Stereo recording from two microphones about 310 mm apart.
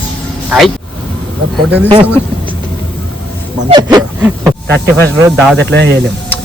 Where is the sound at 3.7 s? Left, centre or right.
Centre.